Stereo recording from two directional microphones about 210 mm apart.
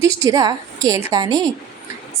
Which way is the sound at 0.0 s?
15° right (ahead or behind).